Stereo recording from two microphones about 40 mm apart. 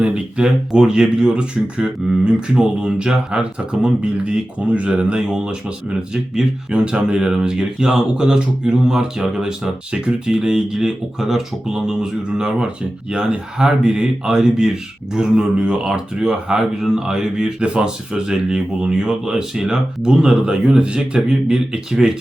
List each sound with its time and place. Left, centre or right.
0.0 s speech: right
5.2 s speech: centre